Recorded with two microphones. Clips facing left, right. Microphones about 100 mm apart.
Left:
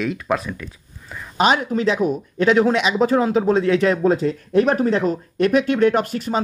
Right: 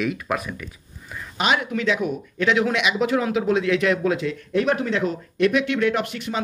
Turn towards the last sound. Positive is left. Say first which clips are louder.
# left 5 dB
turn(degrees=40)  # may be behind; listen again after turning